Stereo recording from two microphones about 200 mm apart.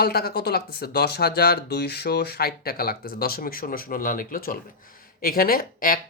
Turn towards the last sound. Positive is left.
turn(degrees=45)  # may be behind; listen again after turning